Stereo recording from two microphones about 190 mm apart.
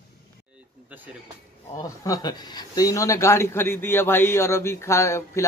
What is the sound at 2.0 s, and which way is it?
A man's voice, 20° left (ahead or behind).